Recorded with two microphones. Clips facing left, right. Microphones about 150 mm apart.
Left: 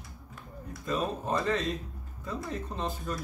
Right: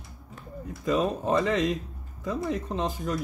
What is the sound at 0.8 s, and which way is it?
Speech, 90° right.